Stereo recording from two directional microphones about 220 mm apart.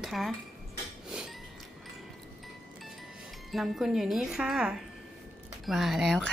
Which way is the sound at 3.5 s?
Centre (ahead or behind).